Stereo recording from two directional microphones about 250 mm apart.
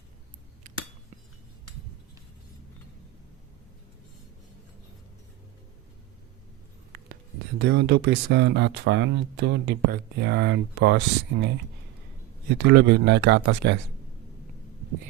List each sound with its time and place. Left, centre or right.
7.6 s speech: right
12.5 s speech: right